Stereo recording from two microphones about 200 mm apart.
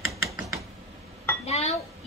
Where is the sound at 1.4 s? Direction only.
30° left (ahead or behind).